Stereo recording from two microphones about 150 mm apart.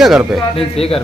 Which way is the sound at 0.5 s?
40° left (ahead or behind).